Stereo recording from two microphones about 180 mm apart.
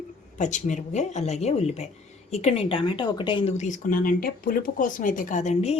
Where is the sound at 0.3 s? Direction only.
45° left (ahead or behind); by 3.5 s 25° left (ahead or behind).